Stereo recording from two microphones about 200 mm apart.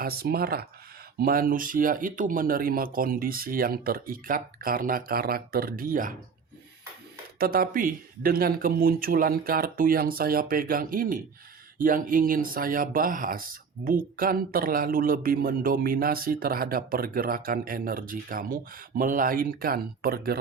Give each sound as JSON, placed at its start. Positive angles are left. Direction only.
{"t": 0.0, "sound": "speech", "side_deg": -50}
{"t": 7.3, "sound": "speech", "side_deg": -50}